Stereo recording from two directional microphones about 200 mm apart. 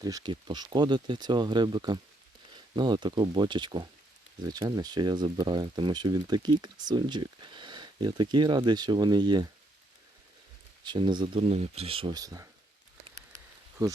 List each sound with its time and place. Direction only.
0.0 s speech: 20° right (ahead or behind)
10.8 s speech: 25° right (ahead or behind)